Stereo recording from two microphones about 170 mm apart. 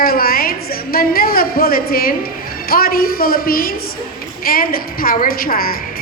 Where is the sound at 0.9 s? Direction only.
60° left (ahead or behind).